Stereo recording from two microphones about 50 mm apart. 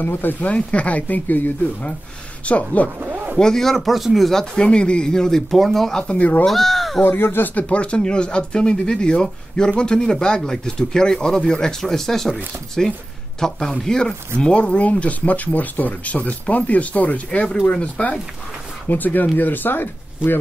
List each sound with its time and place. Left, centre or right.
0.0 s speech: left
0.5 s speech: left
3.0 s a sound: right
3.3 s speech: centre
4.6 s speech: left
6.0 s speech: left
6.4 s speech: centre
7.2 s speech: left
7.5 s speech: left
18.9 s speech: left